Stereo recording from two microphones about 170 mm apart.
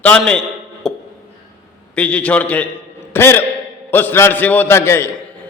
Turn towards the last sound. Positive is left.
turn(degrees=15)  # may be behind; listen again after turning